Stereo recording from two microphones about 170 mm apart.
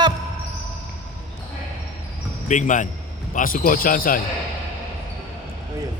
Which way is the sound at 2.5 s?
45° left (ahead or behind).